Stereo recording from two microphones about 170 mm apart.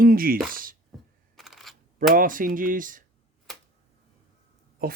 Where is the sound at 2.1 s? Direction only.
55° right (ahead or behind).